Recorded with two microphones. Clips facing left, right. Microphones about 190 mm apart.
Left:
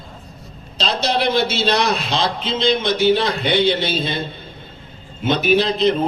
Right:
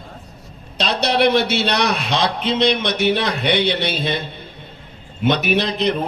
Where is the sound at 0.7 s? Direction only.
65° right (ahead or behind).